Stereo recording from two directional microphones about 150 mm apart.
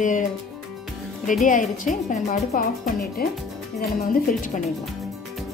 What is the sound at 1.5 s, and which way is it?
Speech, 60° left (ahead or behind).